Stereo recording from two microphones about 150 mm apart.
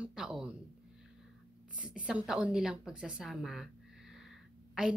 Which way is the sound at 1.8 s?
5° right (ahead or behind).